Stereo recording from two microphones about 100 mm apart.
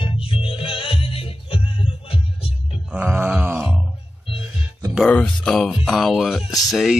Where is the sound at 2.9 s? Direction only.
10° right (ahead or behind).